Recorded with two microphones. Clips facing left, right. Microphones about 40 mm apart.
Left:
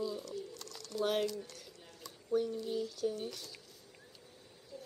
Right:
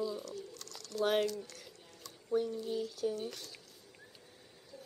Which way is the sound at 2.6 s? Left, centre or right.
Centre.